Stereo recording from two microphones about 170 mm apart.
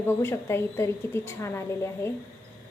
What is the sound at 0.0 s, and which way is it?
A woman's voice, 15° left (ahead or behind).